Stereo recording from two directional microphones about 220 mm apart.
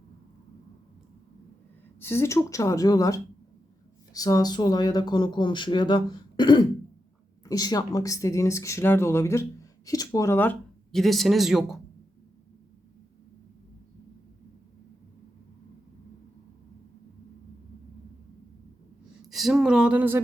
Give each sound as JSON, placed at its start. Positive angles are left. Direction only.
{"t": 2.0, "sound": "speech", "side_deg": 10}
{"t": 19.3, "sound": "speech", "side_deg": 0}